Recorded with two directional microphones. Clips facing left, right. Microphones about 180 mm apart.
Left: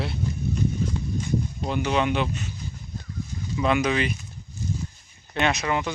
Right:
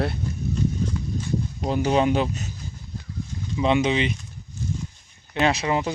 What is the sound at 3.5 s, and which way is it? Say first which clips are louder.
Speech: right 2 dB; 25° right (ahead or behind).